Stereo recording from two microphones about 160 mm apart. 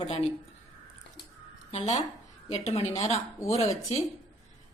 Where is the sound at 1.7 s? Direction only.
40° left (ahead or behind).